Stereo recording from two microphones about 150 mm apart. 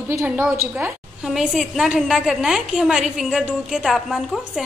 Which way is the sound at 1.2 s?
5° right (ahead or behind).